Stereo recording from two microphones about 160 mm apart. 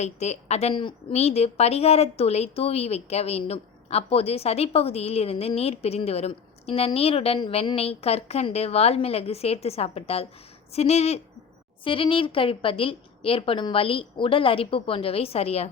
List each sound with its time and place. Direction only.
0.0 s a woman's voice: 45° left (ahead or behind)